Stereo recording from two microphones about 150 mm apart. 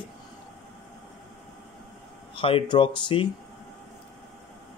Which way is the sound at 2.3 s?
35° left (ahead or behind).